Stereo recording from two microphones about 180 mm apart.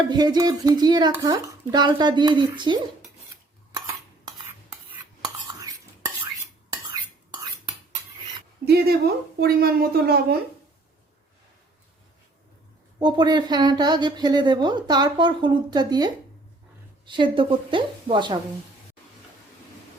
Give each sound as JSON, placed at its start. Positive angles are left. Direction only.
{"t": 0.1, "sound": "a woman's voice", "side_deg": -25}
{"t": 8.6, "sound": "a woman's voice", "side_deg": -60}
{"t": 13.0, "sound": "a woman's voice", "side_deg": -25}